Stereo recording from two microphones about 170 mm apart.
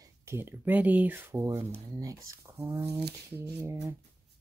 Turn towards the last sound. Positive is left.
turn(degrees=-15)  # may be behind; listen again after turning